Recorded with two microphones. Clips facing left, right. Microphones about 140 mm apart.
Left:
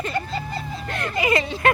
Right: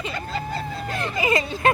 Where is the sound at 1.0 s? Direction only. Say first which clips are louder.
Left 1 dB; 25° right (ahead or behind).